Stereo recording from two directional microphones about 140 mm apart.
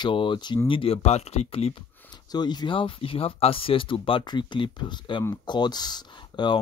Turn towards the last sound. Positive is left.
turn(degrees=30)  # may be behind; listen again after turning